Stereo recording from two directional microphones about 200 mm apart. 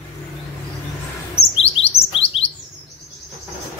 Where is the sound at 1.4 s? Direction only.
30° left (ahead or behind).